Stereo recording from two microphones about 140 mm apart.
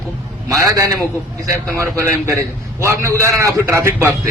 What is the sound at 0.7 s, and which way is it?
A man's voice, 25° right (ahead or behind).